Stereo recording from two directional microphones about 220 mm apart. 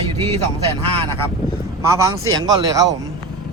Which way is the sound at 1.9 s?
15° right (ahead or behind).